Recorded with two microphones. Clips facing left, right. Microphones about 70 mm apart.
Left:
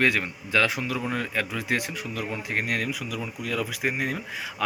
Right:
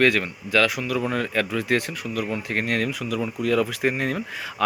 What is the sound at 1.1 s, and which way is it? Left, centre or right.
Speech, centre.